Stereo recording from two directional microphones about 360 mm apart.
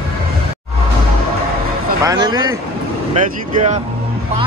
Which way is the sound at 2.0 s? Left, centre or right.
Centre.